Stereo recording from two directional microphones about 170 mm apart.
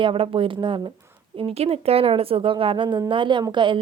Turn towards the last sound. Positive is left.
turn(degrees=-30)  # may be behind; listen again after turning